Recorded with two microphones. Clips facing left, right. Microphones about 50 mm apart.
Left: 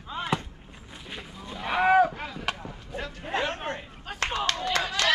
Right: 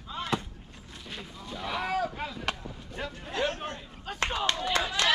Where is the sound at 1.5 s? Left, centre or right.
Left.